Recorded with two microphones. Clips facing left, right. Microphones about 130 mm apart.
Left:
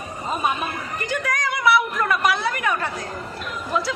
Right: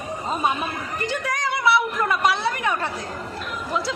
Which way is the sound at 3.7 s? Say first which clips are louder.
Left 2 dB; 25° right (ahead or behind).